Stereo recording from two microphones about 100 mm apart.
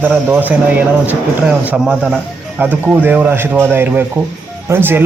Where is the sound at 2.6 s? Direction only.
15° right (ahead or behind).